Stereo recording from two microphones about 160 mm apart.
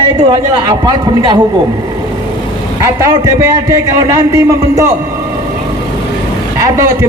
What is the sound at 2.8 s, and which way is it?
A man's voice, 20° right (ahead or behind).